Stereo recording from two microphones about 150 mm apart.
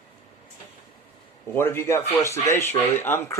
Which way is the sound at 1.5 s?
15° left (ahead or behind).